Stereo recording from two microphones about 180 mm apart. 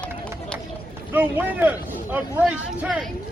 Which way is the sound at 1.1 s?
10° right (ahead or behind).